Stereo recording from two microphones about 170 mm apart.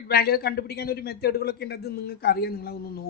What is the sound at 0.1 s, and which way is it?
A man's voice, 65° left (ahead or behind).